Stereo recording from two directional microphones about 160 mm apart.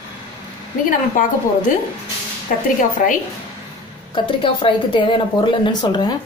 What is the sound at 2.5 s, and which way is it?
Speech, 55° left (ahead or behind).